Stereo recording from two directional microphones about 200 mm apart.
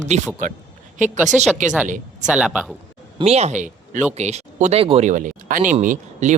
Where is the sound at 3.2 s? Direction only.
30° right (ahead or behind).